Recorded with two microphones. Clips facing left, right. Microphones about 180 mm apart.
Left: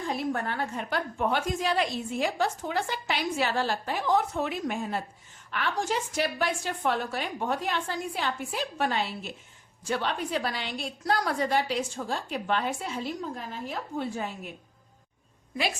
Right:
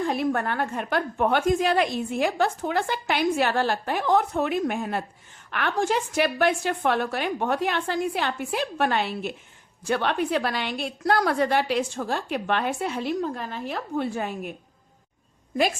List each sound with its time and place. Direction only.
0.1 s a woman's voice: 60° right (ahead or behind)